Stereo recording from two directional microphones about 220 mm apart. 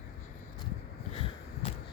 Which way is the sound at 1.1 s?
25° left (ahead or behind).